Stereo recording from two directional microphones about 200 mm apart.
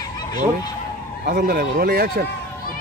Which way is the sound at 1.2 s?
50° right (ahead or behind).